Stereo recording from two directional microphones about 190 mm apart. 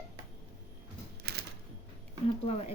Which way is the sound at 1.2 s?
55° right (ahead or behind).